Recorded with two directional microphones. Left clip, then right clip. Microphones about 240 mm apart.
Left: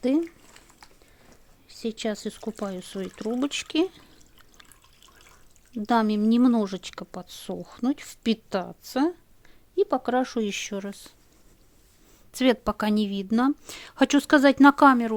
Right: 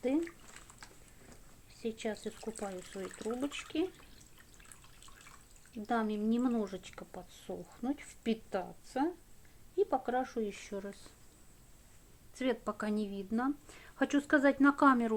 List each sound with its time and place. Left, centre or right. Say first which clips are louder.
1.6 s speech: left 9 dB; left
5.8 s speech: left 11 dB; left
12.3 s speech: left 12 dB; left